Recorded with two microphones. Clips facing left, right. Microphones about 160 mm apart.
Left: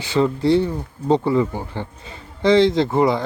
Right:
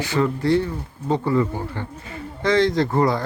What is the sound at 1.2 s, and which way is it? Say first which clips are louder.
Speech: left 2 dB; 15° left (ahead or behind).